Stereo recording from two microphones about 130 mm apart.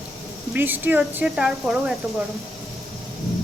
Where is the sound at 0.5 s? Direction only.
15° right (ahead or behind).